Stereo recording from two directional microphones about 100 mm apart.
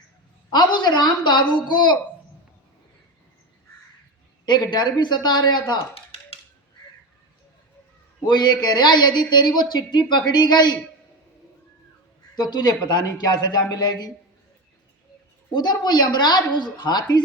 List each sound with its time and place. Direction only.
0.5 s a man's voice: 45° left (ahead or behind)
4.4 s a man's voice: 45° left (ahead or behind)
6.1 s a sound: 80° left
8.2 s a man's voice: 45° left (ahead or behind)
12.4 s a man's voice: 45° left (ahead or behind)
15.5 s a man's voice: 45° left (ahead or behind)